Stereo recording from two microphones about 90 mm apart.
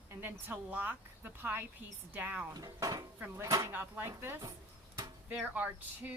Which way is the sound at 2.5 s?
45° right (ahead or behind).